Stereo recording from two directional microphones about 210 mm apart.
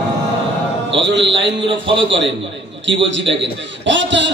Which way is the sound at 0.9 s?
60° right (ahead or behind).